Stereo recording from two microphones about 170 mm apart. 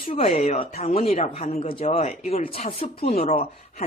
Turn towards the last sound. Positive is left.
turn(degrees=35)  # may be behind; listen again after turning